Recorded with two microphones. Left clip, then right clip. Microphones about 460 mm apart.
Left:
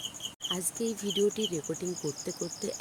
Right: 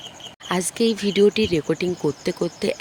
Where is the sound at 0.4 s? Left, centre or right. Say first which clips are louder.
Right 12 dB; left.